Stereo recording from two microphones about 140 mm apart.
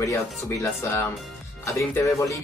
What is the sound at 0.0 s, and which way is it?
Speech, 20° left (ahead or behind).